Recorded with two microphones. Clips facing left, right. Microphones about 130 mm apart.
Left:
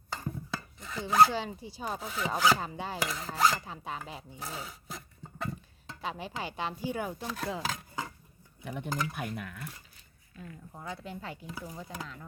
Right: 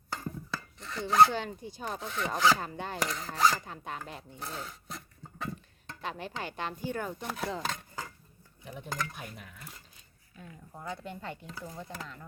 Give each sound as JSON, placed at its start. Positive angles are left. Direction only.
{"t": 0.8, "sound": "speech", "side_deg": 0}
{"t": 1.8, "sound": "rub", "side_deg": 5}
{"t": 6.0, "sound": "a woman's voice", "side_deg": 10}
{"t": 7.3, "sound": "rub", "side_deg": 0}
{"t": 8.6, "sound": "speech", "side_deg": 65}
{"t": 8.9, "sound": "a woman's voice", "side_deg": 10}
{"t": 9.1, "sound": "cutlery", "side_deg": 65}
{"t": 10.3, "sound": "rub", "side_deg": 0}
{"t": 11.5, "sound": "a woman's voice", "side_deg": 10}